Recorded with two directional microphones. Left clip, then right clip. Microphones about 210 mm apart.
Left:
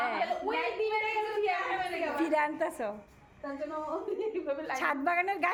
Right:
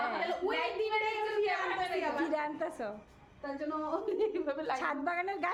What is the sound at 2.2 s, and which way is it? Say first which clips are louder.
Speech: left 4 dB; 10° left (ahead or behind).